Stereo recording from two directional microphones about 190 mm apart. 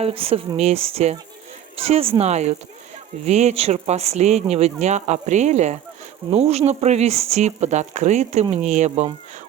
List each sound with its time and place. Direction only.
0.0 s speech: 30° right (ahead or behind)